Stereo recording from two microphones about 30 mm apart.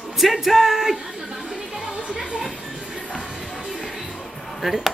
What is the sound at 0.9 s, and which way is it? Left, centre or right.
Chatter, centre.